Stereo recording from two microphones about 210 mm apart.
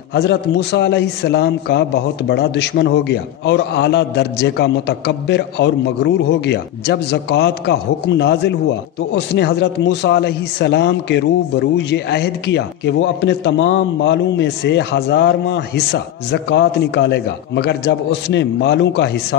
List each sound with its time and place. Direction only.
0.1 s a man's voice: 55° left (ahead or behind)